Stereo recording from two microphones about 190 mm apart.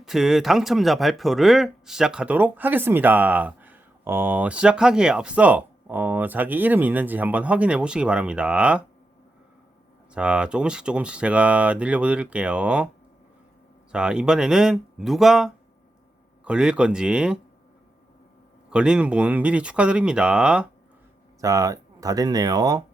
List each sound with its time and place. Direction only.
0.0 s speech: centre (ahead or behind)
10.2 s speech: 5° right (ahead or behind)
13.9 s speech: 5° right (ahead or behind)
18.7 s speech: 5° right (ahead or behind)
21.4 s speech: 20° right (ahead or behind)